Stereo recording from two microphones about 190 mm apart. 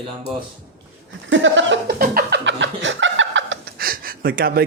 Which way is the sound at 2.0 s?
55° right (ahead or behind).